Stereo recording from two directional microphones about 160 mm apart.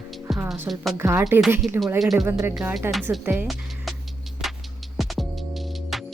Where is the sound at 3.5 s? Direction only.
Centre (ahead or behind).